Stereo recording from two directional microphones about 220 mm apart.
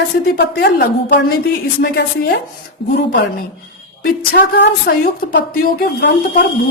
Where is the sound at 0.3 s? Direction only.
45° left (ahead or behind).